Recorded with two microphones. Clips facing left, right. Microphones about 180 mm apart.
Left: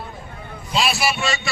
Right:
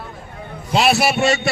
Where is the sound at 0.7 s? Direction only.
65° right (ahead or behind).